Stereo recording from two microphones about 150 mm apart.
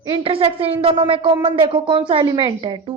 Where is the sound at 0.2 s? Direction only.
40° right (ahead or behind).